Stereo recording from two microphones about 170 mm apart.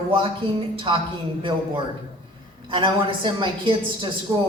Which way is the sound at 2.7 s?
30° right (ahead or behind).